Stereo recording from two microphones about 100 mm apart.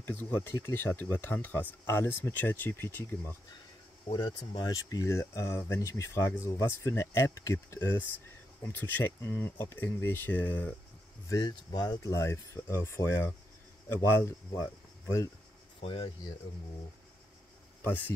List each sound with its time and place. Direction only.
0.0 s speech: 20° left (ahead or behind)
4.1 s speech: 45° left (ahead or behind); by 10.8 s 15° left (ahead or behind)
11.2 s speech: 45° left (ahead or behind)
12.1 s speech: 30° left (ahead or behind)
15.8 s speech: 70° left (ahead or behind)
17.8 s speech: 20° left (ahead or behind)